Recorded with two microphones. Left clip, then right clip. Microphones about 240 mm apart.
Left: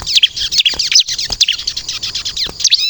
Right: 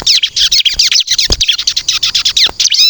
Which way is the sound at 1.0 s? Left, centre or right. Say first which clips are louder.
Right 8 dB; right.